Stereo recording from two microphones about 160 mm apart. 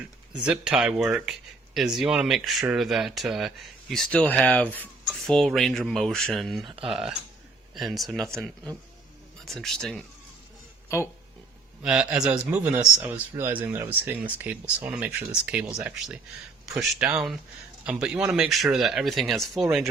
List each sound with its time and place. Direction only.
0.3 s speech: 5° right (ahead or behind)
10.8 s speech: 15° left (ahead or behind)
11.8 s speech: 5° right (ahead or behind)